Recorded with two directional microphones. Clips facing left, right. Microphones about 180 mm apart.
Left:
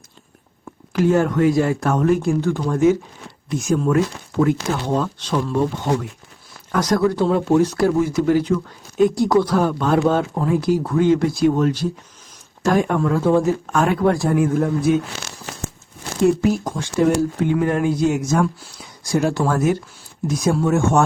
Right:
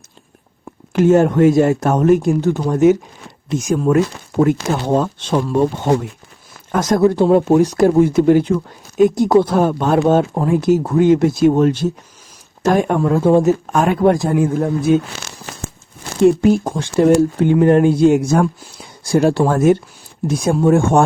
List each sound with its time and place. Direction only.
0.9 s speech: 25° right (ahead or behind)
4.7 s speech: 25° right (ahead or behind)
7.2 s speech: 35° right (ahead or behind)
7.4 s speech: 15° right (ahead or behind)
16.2 s speech: 25° right (ahead or behind)